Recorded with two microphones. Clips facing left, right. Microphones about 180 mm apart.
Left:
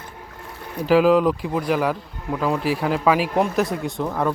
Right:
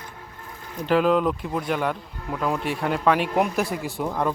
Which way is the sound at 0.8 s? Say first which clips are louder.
Left 4 dB; 5° left (ahead or behind).